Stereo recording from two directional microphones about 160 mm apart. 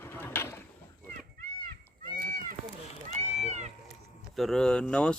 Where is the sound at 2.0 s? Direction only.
60° right (ahead or behind).